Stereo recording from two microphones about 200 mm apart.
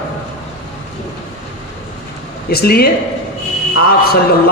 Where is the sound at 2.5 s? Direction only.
50° left (ahead or behind).